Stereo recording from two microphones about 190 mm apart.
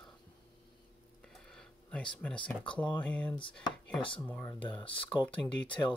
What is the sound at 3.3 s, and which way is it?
Speech, 25° left (ahead or behind).